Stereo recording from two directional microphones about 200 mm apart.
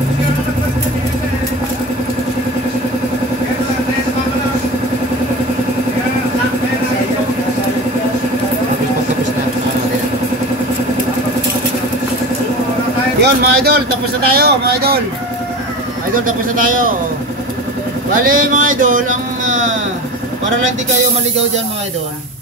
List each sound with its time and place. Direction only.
13.2 s a man's voice: 50° right (ahead or behind)
18.2 s speech: 40° right (ahead or behind)